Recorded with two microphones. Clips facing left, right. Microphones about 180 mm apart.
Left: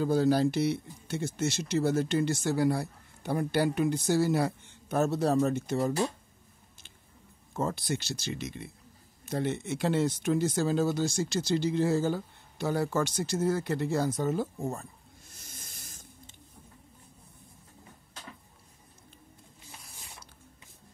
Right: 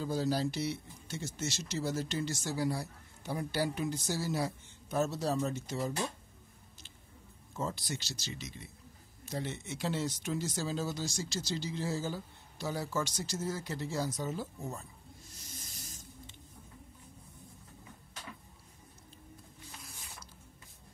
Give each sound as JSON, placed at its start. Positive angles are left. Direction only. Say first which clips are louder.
{"t": 0.0, "sound": "speech", "louder": "left 8 dB", "side_deg": 60}
{"t": 7.5, "sound": "speech", "louder": "left 6 dB", "side_deg": 55}